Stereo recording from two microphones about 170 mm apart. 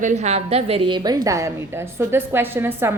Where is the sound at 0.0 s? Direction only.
45° right (ahead or behind).